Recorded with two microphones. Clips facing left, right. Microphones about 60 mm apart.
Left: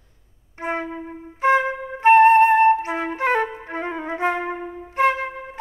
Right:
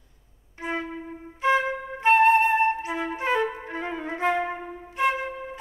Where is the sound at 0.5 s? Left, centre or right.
Left.